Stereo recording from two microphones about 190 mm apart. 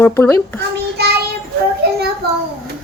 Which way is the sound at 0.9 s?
60° right (ahead or behind).